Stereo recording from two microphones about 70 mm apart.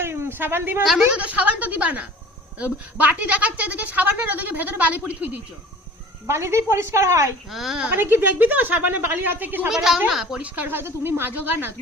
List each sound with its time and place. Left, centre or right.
0.0 s a sound: right
1.1 s speech: centre
6.2 s a woman's voice: right
7.5 s a woman's voice: centre
7.9 s speech: right
9.6 s a woman's voice: centre
10.4 s speech: right